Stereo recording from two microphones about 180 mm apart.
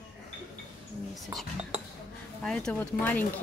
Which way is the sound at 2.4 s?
5° left (ahead or behind).